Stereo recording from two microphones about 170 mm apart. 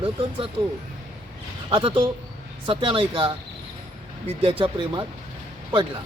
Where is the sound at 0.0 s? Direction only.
35° right (ahead or behind).